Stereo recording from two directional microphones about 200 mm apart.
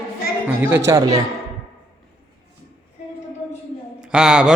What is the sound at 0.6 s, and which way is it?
Speech, 15° right (ahead or behind).